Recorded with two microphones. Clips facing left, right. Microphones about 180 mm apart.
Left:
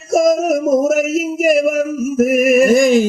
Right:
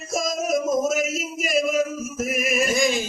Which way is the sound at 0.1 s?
60° left (ahead or behind).